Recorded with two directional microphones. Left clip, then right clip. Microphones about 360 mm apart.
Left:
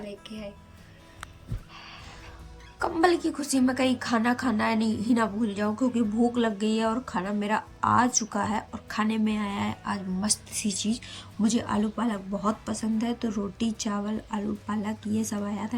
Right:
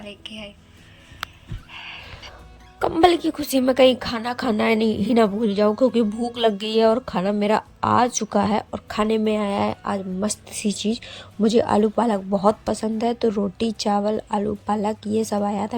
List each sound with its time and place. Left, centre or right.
0.1 s a woman's voice: centre
1.7 s music: centre
2.7 s a woman's voice: centre